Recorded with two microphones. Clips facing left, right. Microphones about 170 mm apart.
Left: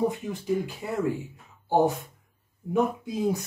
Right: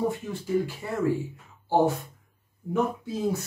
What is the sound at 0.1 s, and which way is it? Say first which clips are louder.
Speech: right 1 dB; 15° left (ahead or behind).